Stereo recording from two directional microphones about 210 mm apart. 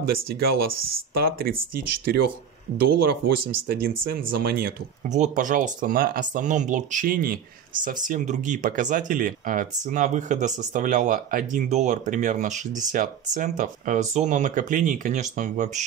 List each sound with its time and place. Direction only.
0.0 s speech: 45° right (ahead or behind)